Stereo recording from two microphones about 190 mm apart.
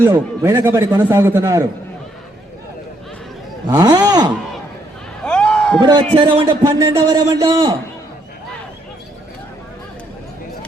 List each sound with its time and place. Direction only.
0.0 s a man's voice: 15° right (ahead or behind)
3.7 s a man's voice: 20° right (ahead or behind)
5.2 s a sound: 5° left (ahead or behind)
6.1 s a man's voice: 25° right (ahead or behind)